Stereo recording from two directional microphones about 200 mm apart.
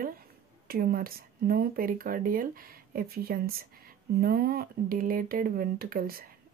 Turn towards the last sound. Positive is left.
turn(degrees=-45)  # may be behind; listen again after turning